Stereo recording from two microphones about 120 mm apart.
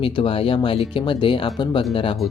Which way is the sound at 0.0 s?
50° left (ahead or behind).